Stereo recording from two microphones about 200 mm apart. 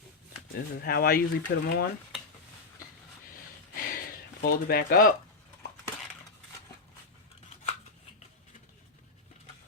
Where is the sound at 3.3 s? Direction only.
45° left (ahead or behind).